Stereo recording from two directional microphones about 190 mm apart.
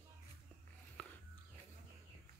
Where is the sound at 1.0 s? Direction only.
5° left (ahead or behind).